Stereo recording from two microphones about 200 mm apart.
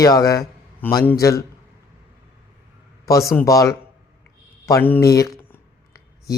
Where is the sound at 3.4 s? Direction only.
15° left (ahead or behind).